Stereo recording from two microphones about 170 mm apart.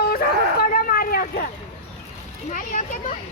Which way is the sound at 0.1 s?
60° left (ahead or behind).